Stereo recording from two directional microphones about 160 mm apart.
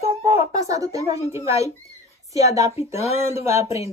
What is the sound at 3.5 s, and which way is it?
Speech, 20° right (ahead or behind).